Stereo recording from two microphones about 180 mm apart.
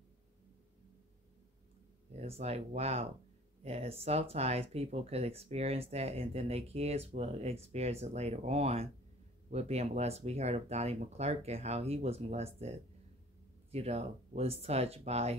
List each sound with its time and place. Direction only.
2.1 s speech: 35° right (ahead or behind)